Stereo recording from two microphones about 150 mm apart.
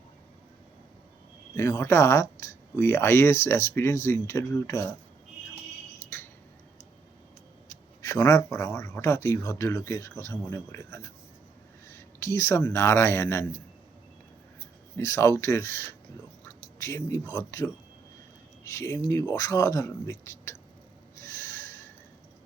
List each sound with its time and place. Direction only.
1.5 s speech: 20° left (ahead or behind)
8.0 s speech: 20° left (ahead or behind)
12.2 s speech: 20° left (ahead or behind)
14.9 s speech: 20° left (ahead or behind)
21.2 s a sound: 20° left (ahead or behind)